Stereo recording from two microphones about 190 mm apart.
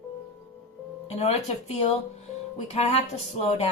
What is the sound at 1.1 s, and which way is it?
Speech, 35° left (ahead or behind).